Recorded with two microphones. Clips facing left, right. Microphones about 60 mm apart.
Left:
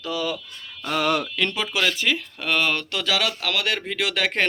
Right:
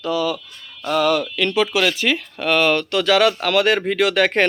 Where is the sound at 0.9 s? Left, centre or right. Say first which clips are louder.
Right 4 dB; left.